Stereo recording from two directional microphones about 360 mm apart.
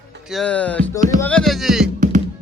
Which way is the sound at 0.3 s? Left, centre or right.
Centre.